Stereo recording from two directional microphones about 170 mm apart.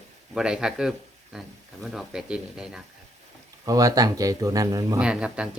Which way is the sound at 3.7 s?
20° right (ahead or behind).